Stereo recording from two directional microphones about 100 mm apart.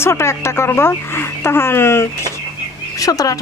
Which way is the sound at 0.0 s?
25° left (ahead or behind).